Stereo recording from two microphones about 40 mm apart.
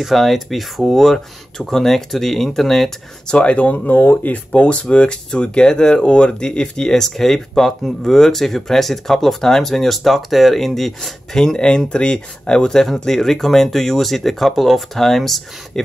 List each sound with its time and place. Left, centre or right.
0.0 s speech: centre
3.3 s speech: left
3.5 s speech: left
3.9 s speech: left; by 15.8 s centre